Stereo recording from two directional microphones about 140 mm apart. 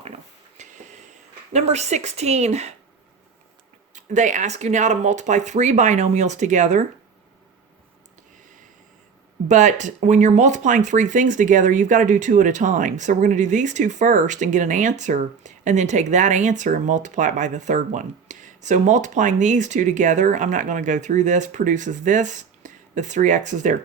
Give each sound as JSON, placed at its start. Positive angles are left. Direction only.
{"t": 0.0, "sound": "a sound", "side_deg": -55}
{"t": 3.9, "sound": "speech", "side_deg": -60}
{"t": 9.5, "sound": "speech", "side_deg": -60}